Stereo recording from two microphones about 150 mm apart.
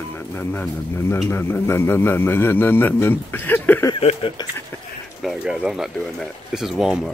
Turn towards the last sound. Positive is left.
turn(degrees=-5)  # may be behind; listen again after turning